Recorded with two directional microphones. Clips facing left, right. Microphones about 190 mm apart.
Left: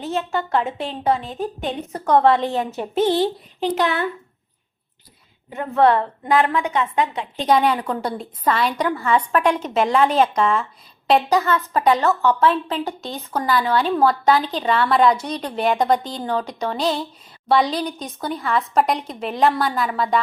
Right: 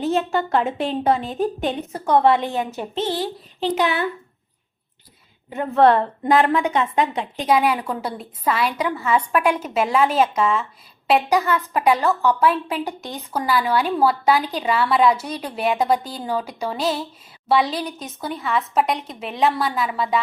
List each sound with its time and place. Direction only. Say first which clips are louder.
0.0 s a woman's voice: right 3 dB; 15° right (ahead or behind)
2.4 s a woman's voice: left 2 dB; 30° left (ahead or behind)
2.6 s a woman's voice: left 5 dB; 5° left (ahead or behind)
5.5 s a woman's voice: right 1 dB; 30° right (ahead or behind)
7.4 s a woman's voice: left 1 dB; 5° right (ahead or behind)